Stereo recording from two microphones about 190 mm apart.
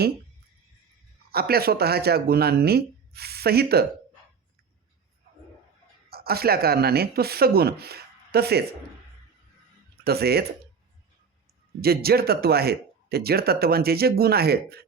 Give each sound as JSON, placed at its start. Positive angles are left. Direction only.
{"t": 1.3, "sound": "speech", "side_deg": -55}
{"t": 6.1, "sound": "speech", "side_deg": -55}
{"t": 10.0, "sound": "speech", "side_deg": -55}
{"t": 11.8, "sound": "speech", "side_deg": -55}